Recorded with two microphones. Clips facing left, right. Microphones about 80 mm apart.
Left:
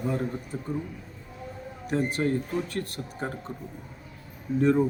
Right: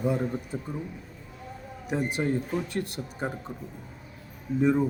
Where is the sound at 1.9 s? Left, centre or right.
Centre.